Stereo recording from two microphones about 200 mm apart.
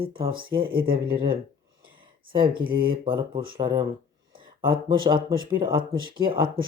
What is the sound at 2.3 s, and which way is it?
Speech, 25° right (ahead or behind).